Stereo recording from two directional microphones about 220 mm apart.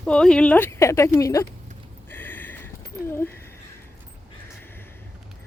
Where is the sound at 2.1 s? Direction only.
10° left (ahead or behind).